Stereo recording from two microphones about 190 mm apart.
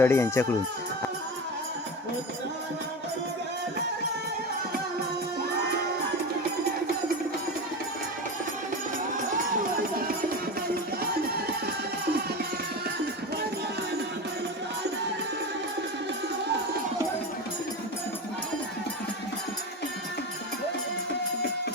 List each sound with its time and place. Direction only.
0.0 s speech: 15° left (ahead or behind)
11.3 s music: 55° right (ahead or behind)